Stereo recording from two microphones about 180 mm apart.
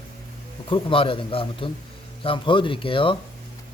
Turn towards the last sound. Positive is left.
turn(degrees=30)  # may be behind; listen again after turning